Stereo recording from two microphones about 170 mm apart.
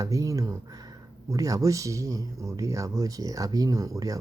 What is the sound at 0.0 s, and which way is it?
Speech, 20° right (ahead or behind).